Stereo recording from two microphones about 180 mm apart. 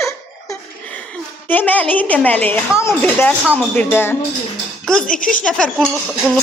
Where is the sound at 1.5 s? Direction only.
10° left (ahead or behind).